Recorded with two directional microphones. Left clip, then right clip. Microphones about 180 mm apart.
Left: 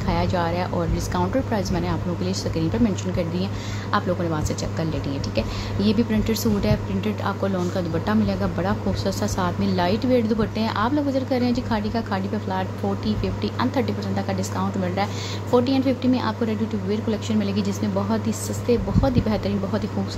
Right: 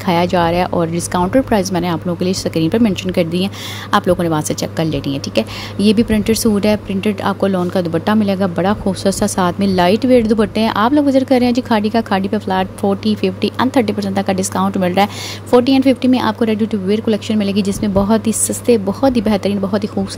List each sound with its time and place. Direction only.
0.0 s a woman's voice: 45° right (ahead or behind)